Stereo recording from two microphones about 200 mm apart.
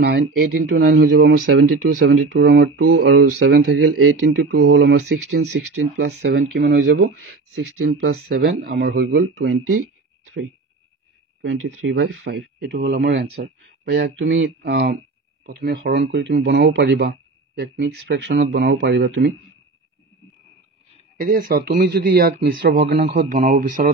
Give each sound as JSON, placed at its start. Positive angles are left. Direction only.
{"t": 0.0, "sound": "speech", "side_deg": -55}
{"t": 6.9, "sound": "speech", "side_deg": -65}
{"t": 11.4, "sound": "speech", "side_deg": -80}
{"t": 21.2, "sound": "speech", "side_deg": -45}